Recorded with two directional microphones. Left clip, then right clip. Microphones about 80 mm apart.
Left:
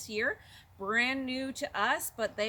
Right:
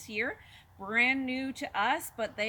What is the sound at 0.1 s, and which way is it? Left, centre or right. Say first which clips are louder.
A woman's voice: left 1 dB; left.